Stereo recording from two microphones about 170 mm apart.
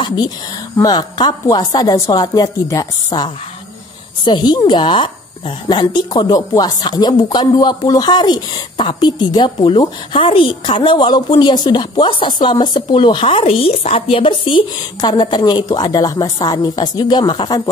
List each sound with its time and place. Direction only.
0.0 s speech: 25° left (ahead or behind)